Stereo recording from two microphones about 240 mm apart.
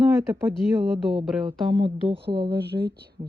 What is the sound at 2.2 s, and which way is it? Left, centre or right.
Speech, right.